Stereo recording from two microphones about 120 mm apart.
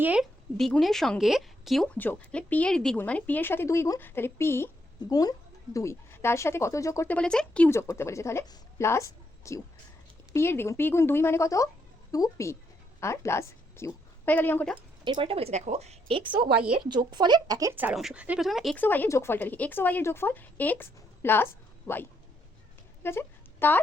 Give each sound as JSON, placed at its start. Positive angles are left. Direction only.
{"t": 0.0, "sound": "speech", "side_deg": -10}
{"t": 0.5, "sound": "speech", "side_deg": 5}
{"t": 2.0, "sound": "a woman's voice", "side_deg": 10}
{"t": 5.0, "sound": "a woman's voice", "side_deg": 30}
{"t": 7.1, "sound": "speech", "side_deg": 10}
{"t": 7.7, "sound": "a woman's voice", "side_deg": 20}
{"t": 15.0, "sound": "speech", "side_deg": -45}
{"t": 16.1, "sound": "a woman's voice", "side_deg": -45}
{"t": 16.6, "sound": "speech", "side_deg": -10}
{"t": 16.9, "sound": "speech", "side_deg": -35}
{"t": 17.7, "sound": "speech", "side_deg": -15}
{"t": 18.8, "sound": "speech", "side_deg": 15}
{"t": 23.0, "sound": "speech", "side_deg": 20}